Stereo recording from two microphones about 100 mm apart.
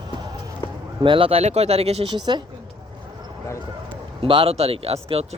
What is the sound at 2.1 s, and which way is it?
Speech, 45° right (ahead or behind).